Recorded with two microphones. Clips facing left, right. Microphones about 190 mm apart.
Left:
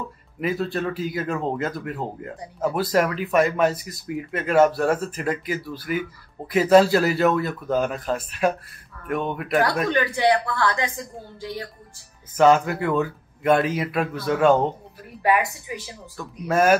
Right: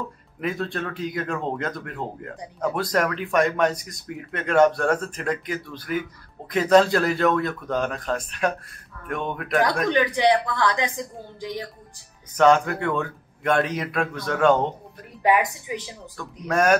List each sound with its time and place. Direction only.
0.4 s speech: 5° left (ahead or behind)
9.8 s a woman's voice: 15° right (ahead or behind)
12.4 s speech: 5° left (ahead or behind)
15.2 s a woman's voice: 20° right (ahead or behind)
16.2 s speech: 5° left (ahead or behind)